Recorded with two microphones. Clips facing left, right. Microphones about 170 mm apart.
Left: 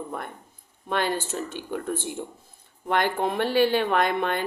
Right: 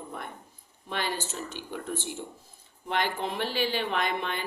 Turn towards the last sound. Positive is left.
turn(degrees=50)  # may be behind; listen again after turning